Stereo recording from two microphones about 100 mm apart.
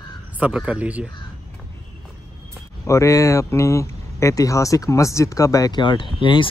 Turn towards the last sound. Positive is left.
turn(degrees=55)  # may be behind; listen again after turning